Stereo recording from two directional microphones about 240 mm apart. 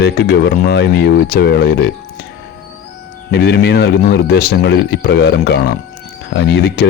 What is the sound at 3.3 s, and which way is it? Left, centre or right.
Speech, left.